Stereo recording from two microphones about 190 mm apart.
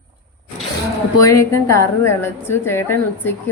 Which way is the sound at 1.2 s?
15° left (ahead or behind).